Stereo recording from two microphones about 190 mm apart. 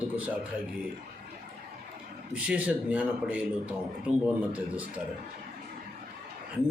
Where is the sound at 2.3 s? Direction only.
5° right (ahead or behind).